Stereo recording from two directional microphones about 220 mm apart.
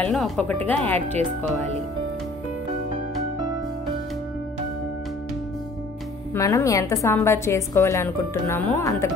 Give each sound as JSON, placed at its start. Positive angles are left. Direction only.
{"t": 0.0, "sound": "a woman's voice", "side_deg": 5}
{"t": 6.3, "sound": "a woman's voice", "side_deg": 15}